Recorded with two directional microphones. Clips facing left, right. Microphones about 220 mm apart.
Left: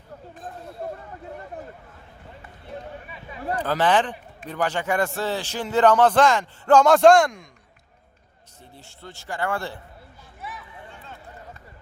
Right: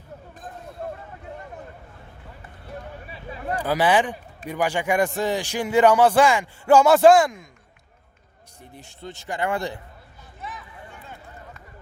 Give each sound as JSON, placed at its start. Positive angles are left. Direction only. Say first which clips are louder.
{"t": 3.5, "sound": "a man's voice", "louder": "right 1 dB", "side_deg": -10}
{"t": 8.7, "sound": "speech", "louder": "right 5 dB", "side_deg": -15}
{"t": 10.4, "sound": "a sound", "louder": "right 1 dB", "side_deg": 10}